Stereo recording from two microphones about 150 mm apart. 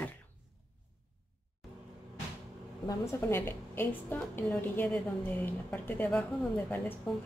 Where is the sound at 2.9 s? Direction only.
20° left (ahead or behind).